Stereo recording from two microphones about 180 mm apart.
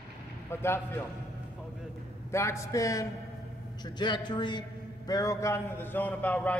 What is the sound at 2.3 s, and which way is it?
A man's voice, 15° left (ahead or behind).